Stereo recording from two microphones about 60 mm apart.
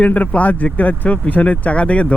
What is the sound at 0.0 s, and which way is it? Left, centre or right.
Speech, left.